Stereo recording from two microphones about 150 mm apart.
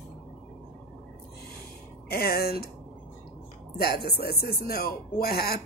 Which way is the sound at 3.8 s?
90° left.